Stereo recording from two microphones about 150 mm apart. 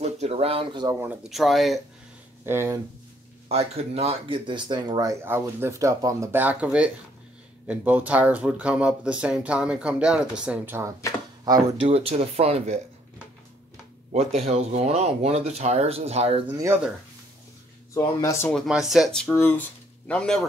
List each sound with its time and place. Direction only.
0.0 s speech: 45° right (ahead or behind)
1.3 s speech: centre (ahead or behind)
2.4 s speech: 15° right (ahead or behind)
3.4 s speech: 45° right (ahead or behind); by 10.9 s 15° right (ahead or behind)
11.4 s speech: 25° right (ahead or behind)
11.9 s speech: 40° right (ahead or behind)
14.1 s speech: 45° right (ahead or behind)
16.5 s speech: 20° right (ahead or behind)
17.9 s speech: 20° left (ahead or behind)
18.5 s speech: 5° right (ahead or behind)